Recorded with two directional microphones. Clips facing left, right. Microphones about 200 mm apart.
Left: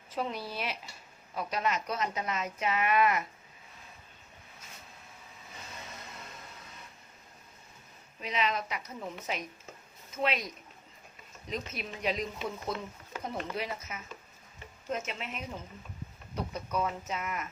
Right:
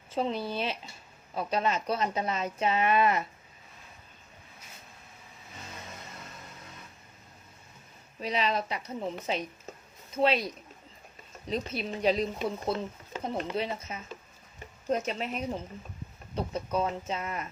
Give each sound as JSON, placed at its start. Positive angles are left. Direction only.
{"t": 0.1, "sound": "speech", "side_deg": -25}
{"t": 8.2, "sound": "speech", "side_deg": -35}